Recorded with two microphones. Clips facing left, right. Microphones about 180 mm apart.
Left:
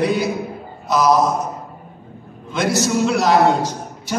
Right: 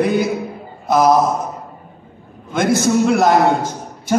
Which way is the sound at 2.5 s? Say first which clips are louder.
Right 3 dB; 55° right (ahead or behind).